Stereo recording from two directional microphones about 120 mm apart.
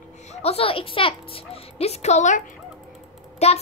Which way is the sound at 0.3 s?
60° left (ahead or behind).